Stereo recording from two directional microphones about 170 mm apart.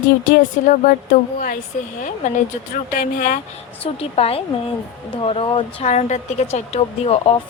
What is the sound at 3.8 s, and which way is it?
A woman's voice, 35° left (ahead or behind).